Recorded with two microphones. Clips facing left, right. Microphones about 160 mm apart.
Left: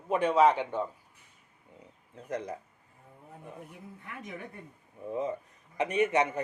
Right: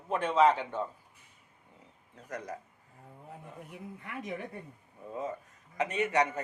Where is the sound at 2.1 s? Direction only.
25° left (ahead or behind).